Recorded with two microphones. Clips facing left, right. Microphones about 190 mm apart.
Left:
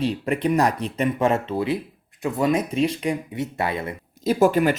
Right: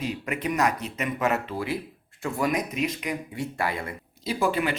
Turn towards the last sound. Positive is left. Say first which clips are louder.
# left 8 dB
turn(degrees=45)  # may be behind; listen again after turning